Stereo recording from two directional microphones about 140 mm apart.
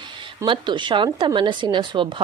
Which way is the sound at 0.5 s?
35° right (ahead or behind).